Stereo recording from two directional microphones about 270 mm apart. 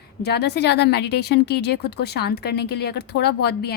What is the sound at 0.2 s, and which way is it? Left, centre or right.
A woman's voice, left.